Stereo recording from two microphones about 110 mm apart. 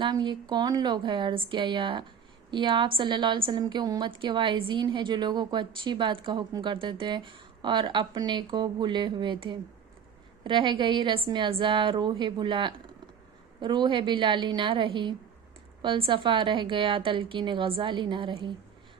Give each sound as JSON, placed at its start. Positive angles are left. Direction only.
{"t": 0.0, "sound": "a woman's voice", "side_deg": -45}